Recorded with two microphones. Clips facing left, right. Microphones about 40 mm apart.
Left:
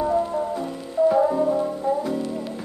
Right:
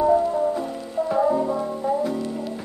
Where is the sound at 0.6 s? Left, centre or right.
Centre.